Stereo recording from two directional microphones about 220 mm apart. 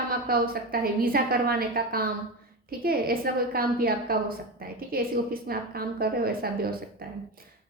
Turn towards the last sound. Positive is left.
turn(degrees=-45)  # may be behind; listen again after turning